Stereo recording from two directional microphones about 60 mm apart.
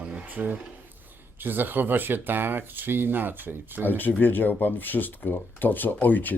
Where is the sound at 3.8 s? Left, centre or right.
Left.